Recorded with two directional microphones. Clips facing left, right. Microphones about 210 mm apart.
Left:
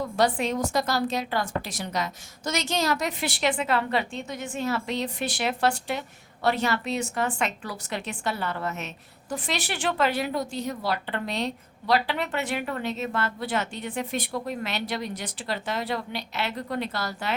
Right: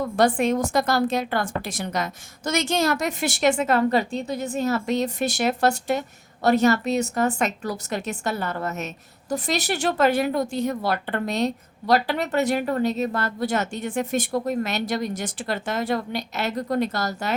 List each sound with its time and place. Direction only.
0.2 s a woman's voice: 50° right (ahead or behind)